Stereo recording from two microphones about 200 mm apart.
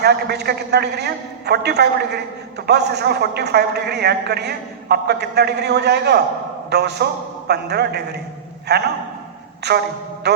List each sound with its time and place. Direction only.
0.0 s a man's voice: 55° right (ahead or behind)